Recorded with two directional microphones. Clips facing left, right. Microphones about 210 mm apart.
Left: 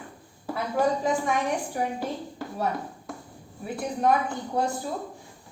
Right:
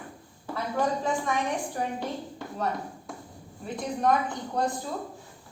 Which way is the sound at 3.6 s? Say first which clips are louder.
Left 1 dB; 10° left (ahead or behind).